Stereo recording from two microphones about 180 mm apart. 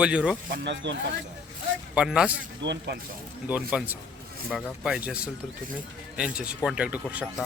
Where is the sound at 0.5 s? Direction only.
75° right (ahead or behind).